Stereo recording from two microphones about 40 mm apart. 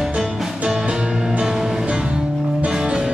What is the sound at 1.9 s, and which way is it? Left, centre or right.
Music, right.